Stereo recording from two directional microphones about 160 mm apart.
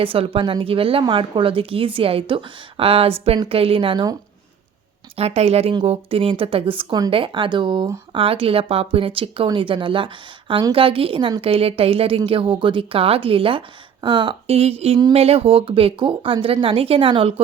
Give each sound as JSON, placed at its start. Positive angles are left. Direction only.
{"t": 0.0, "sound": "a woman's voice", "side_deg": -35}
{"t": 5.1, "sound": "a woman's voice", "side_deg": -40}